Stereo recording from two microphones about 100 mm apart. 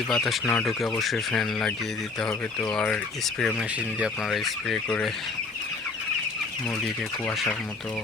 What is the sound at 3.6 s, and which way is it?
Speech, 10° right (ahead or behind).